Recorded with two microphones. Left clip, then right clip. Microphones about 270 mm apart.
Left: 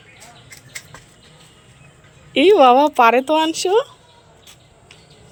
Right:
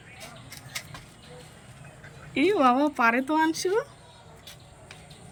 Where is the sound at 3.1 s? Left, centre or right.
Left.